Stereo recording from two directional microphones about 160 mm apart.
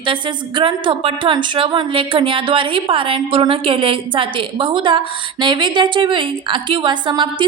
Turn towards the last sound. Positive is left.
turn(degrees=-30)  # may be behind; listen again after turning